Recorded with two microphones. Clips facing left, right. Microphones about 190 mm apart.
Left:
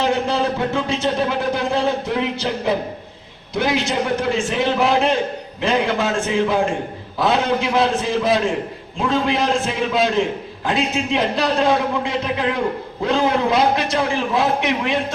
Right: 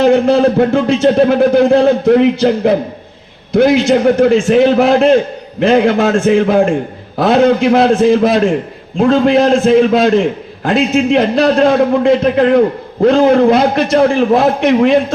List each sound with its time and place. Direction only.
0.0 s a man's voice: 50° right (ahead or behind)